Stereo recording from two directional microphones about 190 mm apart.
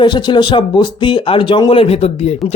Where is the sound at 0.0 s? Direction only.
25° left (ahead or behind).